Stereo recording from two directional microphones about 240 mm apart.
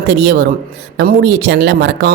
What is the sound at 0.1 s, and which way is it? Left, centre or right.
Speech, right.